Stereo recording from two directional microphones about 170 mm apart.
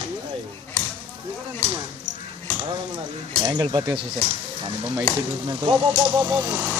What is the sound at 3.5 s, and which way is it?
Speech, 25° right (ahead or behind).